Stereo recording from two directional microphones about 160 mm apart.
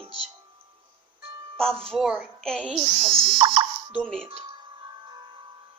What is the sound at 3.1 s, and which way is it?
Speech, 35° right (ahead or behind).